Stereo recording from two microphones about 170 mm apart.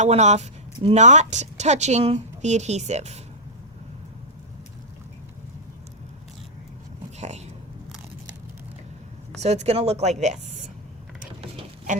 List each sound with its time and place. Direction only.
0.0 s a woman's voice: 40° right (ahead or behind)
7.2 s vehicle: 40° right (ahead or behind)
9.4 s a woman's voice: 40° right (ahead or behind)